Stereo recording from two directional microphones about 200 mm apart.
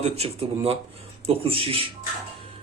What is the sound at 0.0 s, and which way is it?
A man's voice, 30° right (ahead or behind).